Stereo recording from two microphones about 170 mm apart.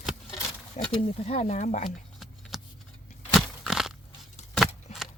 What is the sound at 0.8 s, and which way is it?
Speech, 45° left (ahead or behind).